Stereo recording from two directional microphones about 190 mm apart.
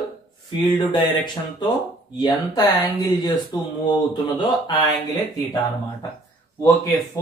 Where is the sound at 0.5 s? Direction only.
25° left (ahead or behind).